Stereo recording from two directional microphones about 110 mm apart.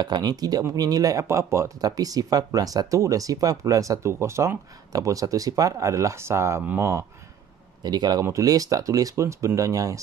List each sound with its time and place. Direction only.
0.0 s speech: 40° right (ahead or behind)
7.8 s speech: 40° right (ahead or behind)